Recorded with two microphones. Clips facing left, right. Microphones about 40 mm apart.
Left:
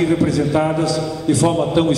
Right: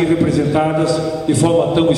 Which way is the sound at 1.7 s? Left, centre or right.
Right.